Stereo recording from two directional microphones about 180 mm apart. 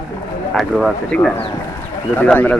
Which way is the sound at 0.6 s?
Centre (ahead or behind).